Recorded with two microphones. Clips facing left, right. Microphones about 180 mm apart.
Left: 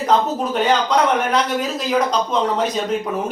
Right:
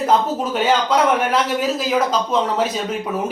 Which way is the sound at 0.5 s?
5° right (ahead or behind).